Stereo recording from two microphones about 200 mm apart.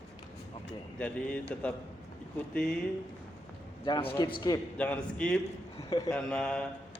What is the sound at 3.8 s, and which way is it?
Speech, 25° left (ahead or behind).